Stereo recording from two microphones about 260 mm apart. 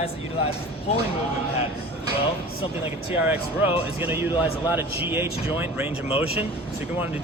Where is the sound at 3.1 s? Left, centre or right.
Centre.